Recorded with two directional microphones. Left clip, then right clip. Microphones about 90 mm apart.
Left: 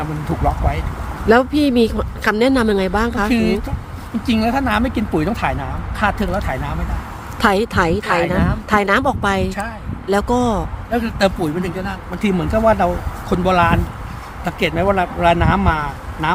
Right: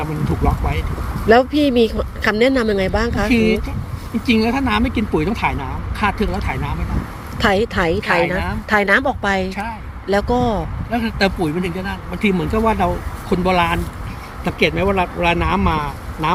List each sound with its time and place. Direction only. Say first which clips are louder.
1.3 s speech: right 1 dB; 45° left (ahead or behind)
5.3 s speech: even; 50° left (ahead or behind)
5.5 s speech: left 1 dB; 40° left (ahead or behind)
7.3 s speech: left 1 dB; 50° left (ahead or behind)
10.9 s speech: left 1 dB; 30° left (ahead or behind)
14.4 s speech: even; 45° left (ahead or behind)